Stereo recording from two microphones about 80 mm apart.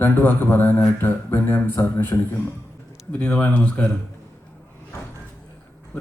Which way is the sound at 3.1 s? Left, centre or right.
Centre.